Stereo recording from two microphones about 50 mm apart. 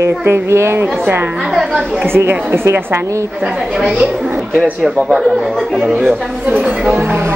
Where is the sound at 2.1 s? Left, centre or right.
Right.